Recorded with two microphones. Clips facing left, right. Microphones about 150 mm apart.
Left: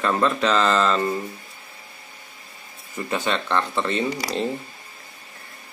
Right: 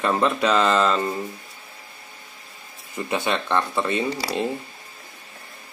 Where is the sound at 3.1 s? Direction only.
15° right (ahead or behind).